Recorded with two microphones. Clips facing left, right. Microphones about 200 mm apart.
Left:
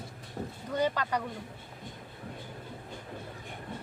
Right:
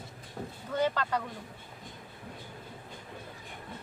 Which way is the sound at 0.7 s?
15° left (ahead or behind).